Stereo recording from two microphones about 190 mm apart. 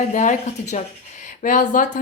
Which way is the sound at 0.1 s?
40° left (ahead or behind).